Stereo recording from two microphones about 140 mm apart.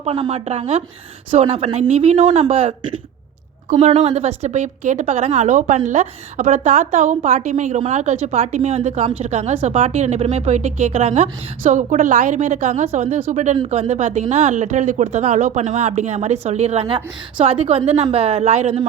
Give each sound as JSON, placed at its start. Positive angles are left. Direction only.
{"t": 0.0, "sound": "speech", "side_deg": -50}
{"t": 3.7, "sound": "a woman's voice", "side_deg": -55}